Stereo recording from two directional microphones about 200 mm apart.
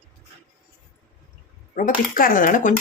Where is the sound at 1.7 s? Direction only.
45° left (ahead or behind).